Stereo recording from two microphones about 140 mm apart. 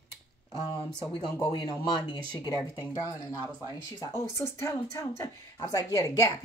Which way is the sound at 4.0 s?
20° left (ahead or behind).